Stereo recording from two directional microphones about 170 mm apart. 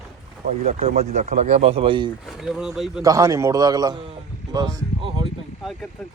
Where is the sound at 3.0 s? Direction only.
20° right (ahead or behind).